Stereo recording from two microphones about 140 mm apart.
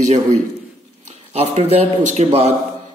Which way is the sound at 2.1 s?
50° right (ahead or behind).